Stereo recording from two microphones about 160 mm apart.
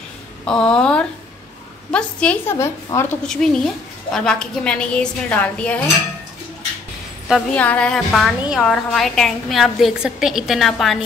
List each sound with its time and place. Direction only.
0.5 s a woman's voice: 5° left (ahead or behind)
2.5 s a woman's voice: 15° left (ahead or behind)
3.4 s a woman's voice: 5° left (ahead or behind)
7.2 s a woman's voice: 5° left (ahead or behind)